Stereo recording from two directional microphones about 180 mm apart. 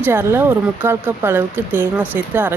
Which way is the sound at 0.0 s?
15° right (ahead or behind).